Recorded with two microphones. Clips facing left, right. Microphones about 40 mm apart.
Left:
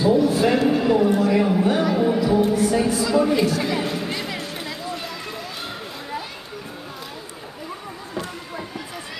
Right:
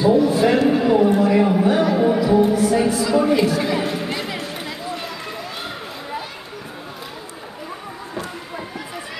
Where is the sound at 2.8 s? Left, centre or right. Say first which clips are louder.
Right 2 dB; centre.